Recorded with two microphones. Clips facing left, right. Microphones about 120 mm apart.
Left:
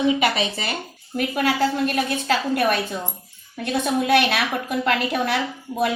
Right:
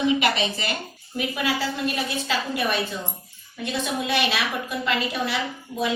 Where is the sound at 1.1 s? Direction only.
50° left (ahead or behind).